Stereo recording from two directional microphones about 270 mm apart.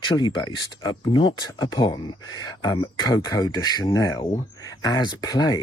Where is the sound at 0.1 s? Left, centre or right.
Centre.